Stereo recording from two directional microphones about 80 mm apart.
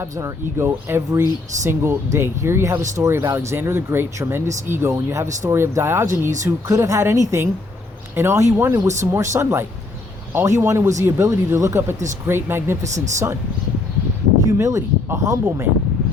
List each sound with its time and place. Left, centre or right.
0.0 s speech: right
12.8 s speech: right
14.6 s speech: right